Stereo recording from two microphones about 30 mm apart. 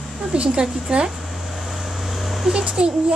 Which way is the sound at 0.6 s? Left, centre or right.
Centre.